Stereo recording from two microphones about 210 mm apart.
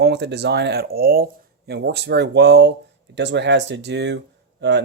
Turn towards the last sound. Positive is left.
turn(degrees=-55)  # may be behind; listen again after turning